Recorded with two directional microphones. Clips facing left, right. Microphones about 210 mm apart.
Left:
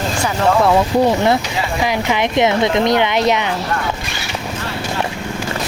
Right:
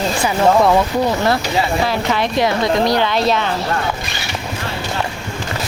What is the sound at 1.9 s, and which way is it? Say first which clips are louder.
Speech: left 1 dB; 15° left (ahead or behind).